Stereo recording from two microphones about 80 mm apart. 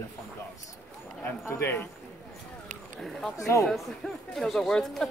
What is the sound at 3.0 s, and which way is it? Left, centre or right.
Speech, centre.